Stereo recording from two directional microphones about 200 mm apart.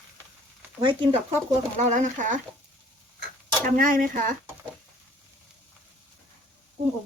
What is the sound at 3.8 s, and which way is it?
Speech, 45° right (ahead or behind).